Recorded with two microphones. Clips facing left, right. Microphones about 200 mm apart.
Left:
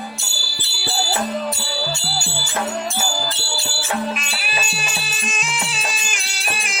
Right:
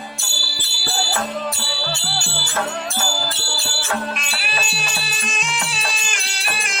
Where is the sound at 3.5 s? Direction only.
Centre (ahead or behind).